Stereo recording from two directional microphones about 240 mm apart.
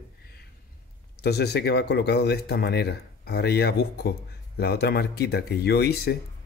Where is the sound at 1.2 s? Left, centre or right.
Left.